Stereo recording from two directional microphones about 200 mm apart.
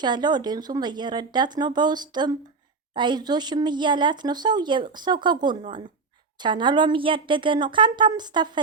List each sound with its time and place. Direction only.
0.0 s speech: 20° right (ahead or behind)